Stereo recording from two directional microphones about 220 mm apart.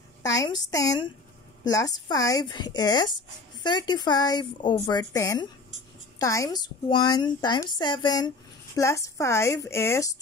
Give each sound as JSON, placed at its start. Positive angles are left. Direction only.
{"t": 0.2, "sound": "a woman's voice", "side_deg": 15}